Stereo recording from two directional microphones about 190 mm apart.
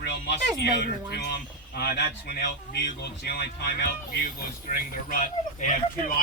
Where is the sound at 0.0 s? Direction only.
60° left (ahead or behind).